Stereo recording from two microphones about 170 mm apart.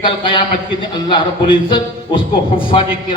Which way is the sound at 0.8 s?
30° left (ahead or behind).